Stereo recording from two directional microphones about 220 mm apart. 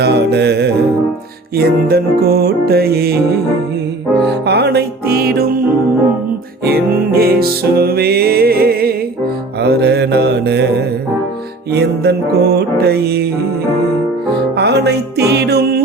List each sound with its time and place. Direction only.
0.0 s music: 45° right (ahead or behind)
6.7 s music: 45° right (ahead or behind)
11.7 s music: 50° right (ahead or behind)
14.5 s music: 50° right (ahead or behind)